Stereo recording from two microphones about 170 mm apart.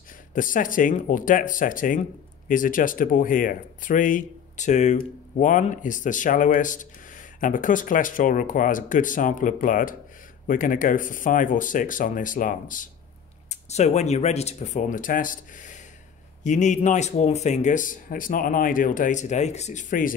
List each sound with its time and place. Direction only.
0.3 s speech: 50° left (ahead or behind)